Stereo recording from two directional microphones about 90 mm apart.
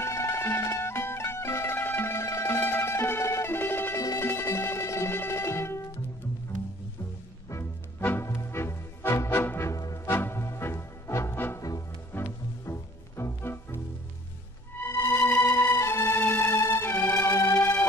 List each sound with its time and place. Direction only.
0.0 s music: 30° left (ahead or behind)
8.0 s music: 20° left (ahead or behind)
8.3 s music: 30° left (ahead or behind)
9.8 s music: 40° left (ahead or behind)
10.1 s music: 25° left (ahead or behind)
14.9 s music: 30° left (ahead or behind)